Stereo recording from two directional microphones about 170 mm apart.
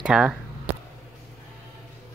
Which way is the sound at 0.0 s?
5° right (ahead or behind).